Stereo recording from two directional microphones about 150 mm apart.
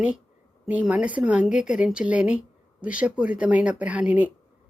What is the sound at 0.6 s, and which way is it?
A woman's voice, 10° right (ahead or behind).